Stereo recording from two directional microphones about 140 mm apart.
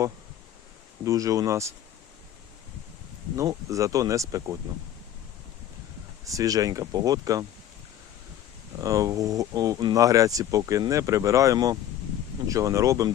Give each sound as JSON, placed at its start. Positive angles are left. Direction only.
{"t": 1.0, "sound": "speech", "side_deg": -25}
{"t": 3.3, "sound": "speech", "side_deg": -25}
{"t": 6.2, "sound": "speech", "side_deg": -25}
{"t": 8.8, "sound": "speech", "side_deg": -25}